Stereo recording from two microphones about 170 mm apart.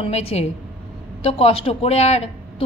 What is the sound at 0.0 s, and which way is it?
A woman's voice, 35° left (ahead or behind).